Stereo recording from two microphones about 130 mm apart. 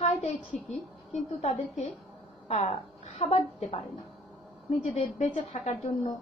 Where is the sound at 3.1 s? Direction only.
50° left (ahead or behind).